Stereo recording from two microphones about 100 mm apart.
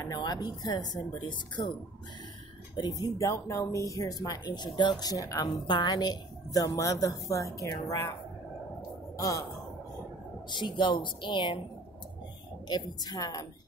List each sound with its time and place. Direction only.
0.0 s speech: 40° left (ahead or behind)
1.6 s speech: 55° left (ahead or behind)
2.7 s speech: 40° left (ahead or behind)
9.1 s speech: 35° left (ahead or behind)
10.5 s speech: 50° left (ahead or behind)
12.6 s speech: 45° left (ahead or behind)